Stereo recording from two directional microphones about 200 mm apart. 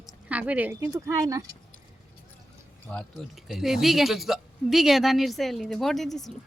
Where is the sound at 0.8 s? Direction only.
15° right (ahead or behind).